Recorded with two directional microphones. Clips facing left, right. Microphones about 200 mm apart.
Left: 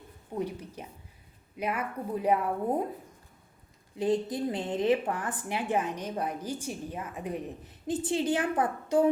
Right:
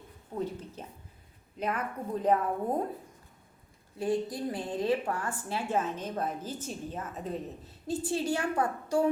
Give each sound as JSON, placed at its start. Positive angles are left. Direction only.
{"t": 0.3, "sound": "a woman's voice", "side_deg": 15}
{"t": 3.9, "sound": "a woman's voice", "side_deg": 20}